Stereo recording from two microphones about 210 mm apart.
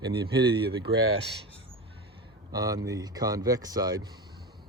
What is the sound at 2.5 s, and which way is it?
Speech, 15° right (ahead or behind).